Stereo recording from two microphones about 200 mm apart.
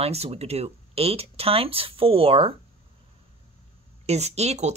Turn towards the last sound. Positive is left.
turn(degrees=-35)  # may be behind; listen again after turning